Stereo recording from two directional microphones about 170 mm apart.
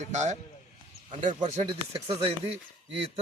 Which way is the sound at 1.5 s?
35° right (ahead or behind).